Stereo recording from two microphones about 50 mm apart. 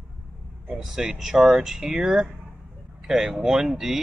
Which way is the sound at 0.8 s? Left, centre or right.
Centre.